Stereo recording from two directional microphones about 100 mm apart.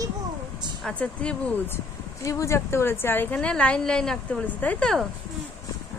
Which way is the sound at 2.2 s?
30° left (ahead or behind).